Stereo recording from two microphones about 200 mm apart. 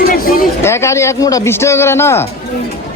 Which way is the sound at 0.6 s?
15° left (ahead or behind).